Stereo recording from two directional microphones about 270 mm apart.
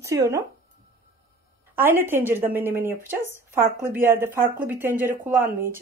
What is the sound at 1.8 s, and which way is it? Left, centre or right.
Speech, centre.